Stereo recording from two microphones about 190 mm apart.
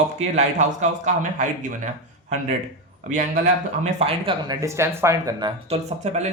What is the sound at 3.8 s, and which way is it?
Speech, 30° right (ahead or behind).